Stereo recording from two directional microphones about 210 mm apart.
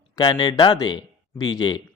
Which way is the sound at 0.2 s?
20° left (ahead or behind).